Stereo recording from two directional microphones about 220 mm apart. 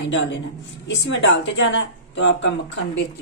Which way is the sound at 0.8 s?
50° left (ahead or behind).